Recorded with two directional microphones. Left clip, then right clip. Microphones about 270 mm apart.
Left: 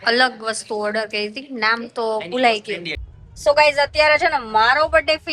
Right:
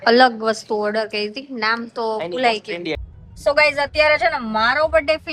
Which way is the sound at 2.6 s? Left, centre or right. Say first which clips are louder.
Even; right.